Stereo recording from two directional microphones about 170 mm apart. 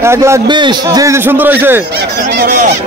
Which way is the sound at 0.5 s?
25° right (ahead or behind).